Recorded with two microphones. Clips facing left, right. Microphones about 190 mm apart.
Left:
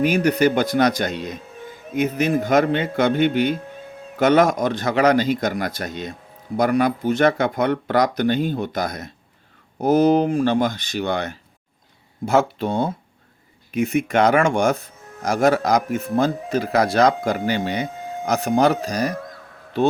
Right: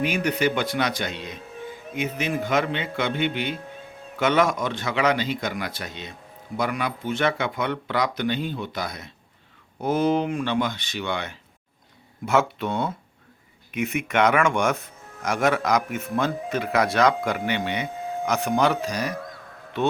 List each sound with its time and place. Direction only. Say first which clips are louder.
0.0 s speech: left 6 dB; 40° left (ahead or behind)